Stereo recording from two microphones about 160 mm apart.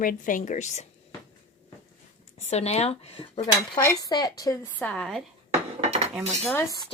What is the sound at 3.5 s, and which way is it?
Dishes, 20° left (ahead or behind).